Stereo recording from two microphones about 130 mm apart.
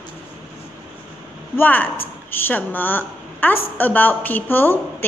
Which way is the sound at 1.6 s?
15° left (ahead or behind).